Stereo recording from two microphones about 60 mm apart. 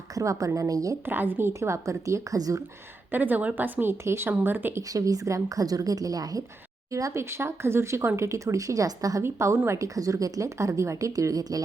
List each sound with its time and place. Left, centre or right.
0.1 s speech: right
1.0 s a woman's voice: right
3.1 s a woman's voice: right
4.8 s a woman's voice: right
6.9 s speech: right
9.2 s speech: right
9.6 s speech: right